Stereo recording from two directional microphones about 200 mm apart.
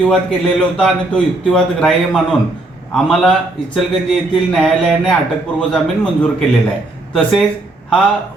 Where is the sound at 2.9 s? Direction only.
5° left (ahead or behind).